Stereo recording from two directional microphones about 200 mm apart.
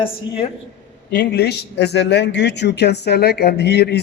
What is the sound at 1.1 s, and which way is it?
Speech, 50° left (ahead or behind).